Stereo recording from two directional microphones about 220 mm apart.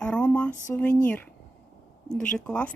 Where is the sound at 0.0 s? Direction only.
5° left (ahead or behind).